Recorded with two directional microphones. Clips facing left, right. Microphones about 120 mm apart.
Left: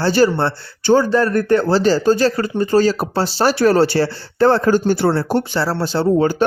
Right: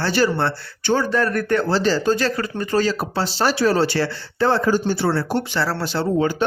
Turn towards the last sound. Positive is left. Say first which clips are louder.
# left 5 dB
turn(degrees=40)  # may be behind; listen again after turning